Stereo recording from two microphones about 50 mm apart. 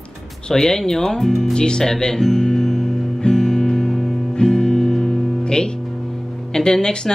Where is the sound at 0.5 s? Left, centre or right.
Centre.